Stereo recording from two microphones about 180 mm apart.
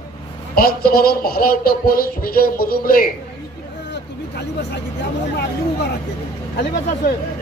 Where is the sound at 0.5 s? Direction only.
55° left (ahead or behind).